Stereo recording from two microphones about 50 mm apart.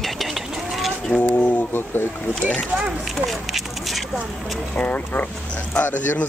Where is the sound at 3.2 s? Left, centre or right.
Centre.